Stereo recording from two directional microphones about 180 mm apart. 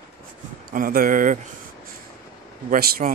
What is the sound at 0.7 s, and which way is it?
Speech, 55° right (ahead or behind).